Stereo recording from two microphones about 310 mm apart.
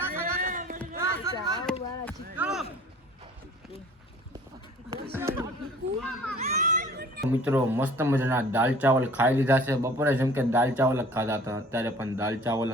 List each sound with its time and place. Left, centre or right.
0.3 s run: right
0.9 s music: centre
2.4 s a sound: centre
4.9 s chatter: centre
6.0 s children playing: centre
6.4 s children playing: right
7.3 s speech: centre